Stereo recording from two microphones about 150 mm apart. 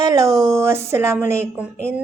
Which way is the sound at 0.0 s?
25° right (ahead or behind).